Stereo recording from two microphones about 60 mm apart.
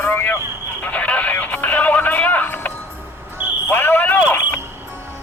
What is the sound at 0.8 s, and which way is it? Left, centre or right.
Music, left.